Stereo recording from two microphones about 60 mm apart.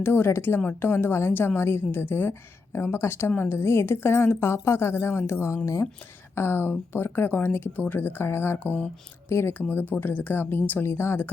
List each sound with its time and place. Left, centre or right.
0.0 s a woman's voice: left
9.3 s a woman's voice: left
9.6 s speech: left